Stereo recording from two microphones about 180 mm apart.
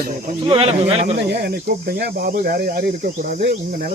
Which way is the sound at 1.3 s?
65° right (ahead or behind).